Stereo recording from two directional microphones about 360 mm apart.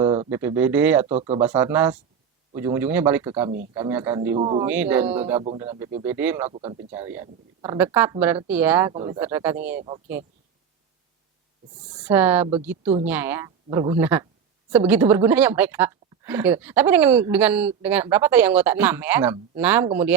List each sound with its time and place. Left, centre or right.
0.0 s speech: centre
1.1 s a woman's voice: centre
1.4 s a woman's voice: centre
6.5 s a woman's voice: centre
11.9 s speech: centre
12.8 s a woman's voice: centre
13.1 s a woman's voice: centre